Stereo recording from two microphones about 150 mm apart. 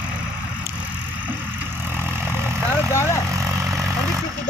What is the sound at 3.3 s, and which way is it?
Vehicle, 20° right (ahead or behind).